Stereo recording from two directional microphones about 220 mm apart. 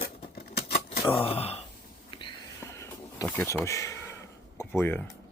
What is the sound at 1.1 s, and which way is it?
Speech, 25° left (ahead or behind).